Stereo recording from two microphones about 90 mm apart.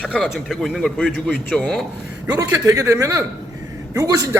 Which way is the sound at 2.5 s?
35° right (ahead or behind).